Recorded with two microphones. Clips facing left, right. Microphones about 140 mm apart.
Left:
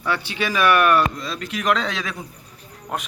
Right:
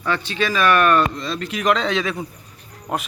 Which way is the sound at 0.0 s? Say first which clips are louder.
Right 2 dB; 10° left (ahead or behind).